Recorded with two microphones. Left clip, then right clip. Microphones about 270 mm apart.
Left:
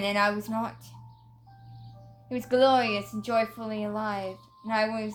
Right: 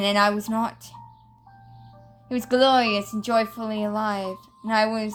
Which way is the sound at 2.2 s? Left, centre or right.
Right.